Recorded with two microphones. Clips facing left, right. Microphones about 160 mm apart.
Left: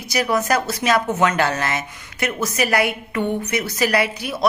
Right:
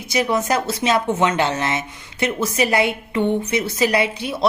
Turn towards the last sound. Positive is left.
turn(degrees=-25)  # may be behind; listen again after turning